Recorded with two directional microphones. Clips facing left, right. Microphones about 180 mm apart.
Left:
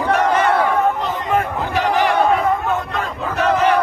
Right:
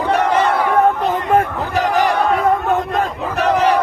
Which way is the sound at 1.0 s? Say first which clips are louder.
Right 4 dB; 45° right (ahead or behind).